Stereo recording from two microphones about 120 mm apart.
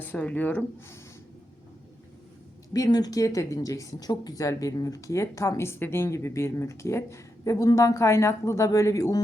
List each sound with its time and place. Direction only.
0.0 s speech: 15° left (ahead or behind)
2.7 s speech: 30° left (ahead or behind)